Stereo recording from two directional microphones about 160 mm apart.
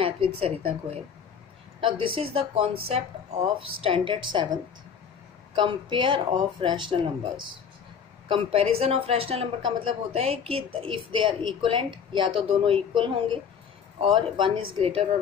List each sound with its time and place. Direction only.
0.0 s a woman's voice: 35° right (ahead or behind)
1.8 s speech: 35° right (ahead or behind)
5.6 s speech: 30° right (ahead or behind)
8.3 s speech: 35° right (ahead or behind)